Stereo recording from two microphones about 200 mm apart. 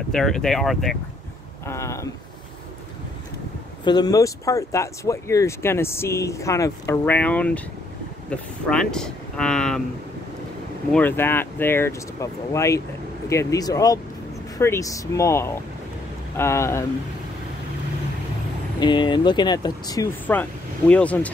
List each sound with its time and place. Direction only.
0.1 s speech: centre (ahead or behind)
1.7 s a sound: 15° left (ahead or behind)
3.8 s speech: 20° left (ahead or behind); by 9.8 s 5° left (ahead or behind)
10.9 s speech: 10° left (ahead or behind)
18.8 s speech: 25° left (ahead or behind)
20.3 s speech: 10° left (ahead or behind)